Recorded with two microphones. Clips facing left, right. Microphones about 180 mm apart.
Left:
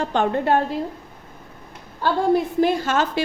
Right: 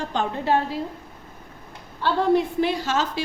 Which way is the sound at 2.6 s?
50° left (ahead or behind).